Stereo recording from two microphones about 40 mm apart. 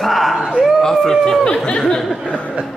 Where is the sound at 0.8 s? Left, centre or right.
Centre.